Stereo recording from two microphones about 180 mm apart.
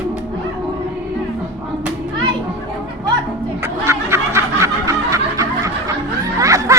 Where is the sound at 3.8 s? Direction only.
15° right (ahead or behind).